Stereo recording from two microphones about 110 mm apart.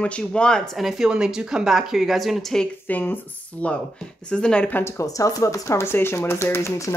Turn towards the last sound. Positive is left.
turn(degrees=25)  # may be behind; listen again after turning